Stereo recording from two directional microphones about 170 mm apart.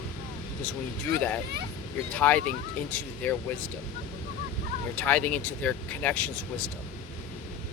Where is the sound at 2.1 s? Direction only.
10° left (ahead or behind).